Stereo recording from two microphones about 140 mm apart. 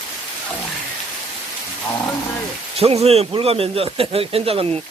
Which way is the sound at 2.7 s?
45° right (ahead or behind).